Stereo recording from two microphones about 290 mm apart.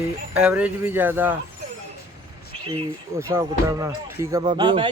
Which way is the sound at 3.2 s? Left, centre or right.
Centre.